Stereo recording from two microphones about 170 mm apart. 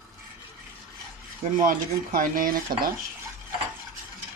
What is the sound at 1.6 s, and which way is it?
Speech, 50° right (ahead or behind).